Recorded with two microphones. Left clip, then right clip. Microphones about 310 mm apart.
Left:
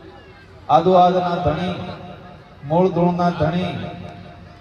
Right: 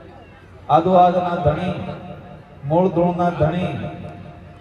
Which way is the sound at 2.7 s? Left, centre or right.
Left.